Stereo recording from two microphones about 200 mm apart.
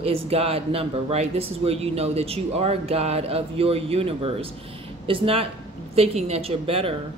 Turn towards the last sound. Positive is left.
turn(degrees=-30)  # may be behind; listen again after turning